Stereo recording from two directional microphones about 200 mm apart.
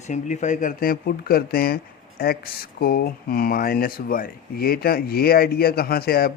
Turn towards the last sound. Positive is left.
turn(degrees=50)  # may be behind; listen again after turning